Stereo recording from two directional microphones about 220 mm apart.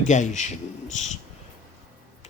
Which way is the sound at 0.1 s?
30° left (ahead or behind).